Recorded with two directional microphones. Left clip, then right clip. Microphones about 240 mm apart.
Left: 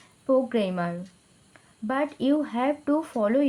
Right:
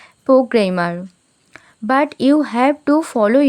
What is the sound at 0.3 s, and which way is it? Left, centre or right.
Speech, right.